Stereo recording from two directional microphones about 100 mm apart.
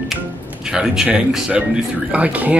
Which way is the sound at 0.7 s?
5° right (ahead or behind).